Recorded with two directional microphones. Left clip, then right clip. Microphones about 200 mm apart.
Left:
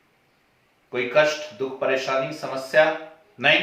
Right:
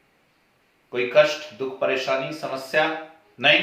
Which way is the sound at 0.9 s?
10° right (ahead or behind).